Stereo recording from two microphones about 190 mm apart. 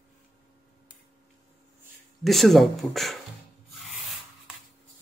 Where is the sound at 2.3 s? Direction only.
Centre (ahead or behind).